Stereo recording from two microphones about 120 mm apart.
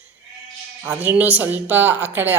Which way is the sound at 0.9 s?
15° right (ahead or behind).